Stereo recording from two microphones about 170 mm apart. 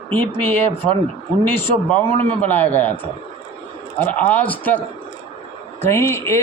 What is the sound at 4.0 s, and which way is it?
Speech, 10° left (ahead or behind).